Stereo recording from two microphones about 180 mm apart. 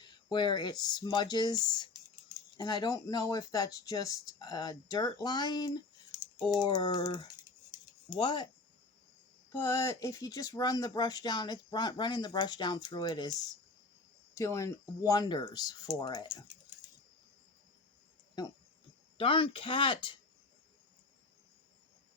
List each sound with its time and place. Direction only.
0.0 s speech: 25° left (ahead or behind)
9.5 s speech: 15° left (ahead or behind)
19.1 s speech: 30° left (ahead or behind)